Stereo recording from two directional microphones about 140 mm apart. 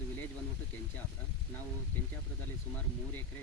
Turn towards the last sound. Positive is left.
turn(degrees=15)  # may be behind; listen again after turning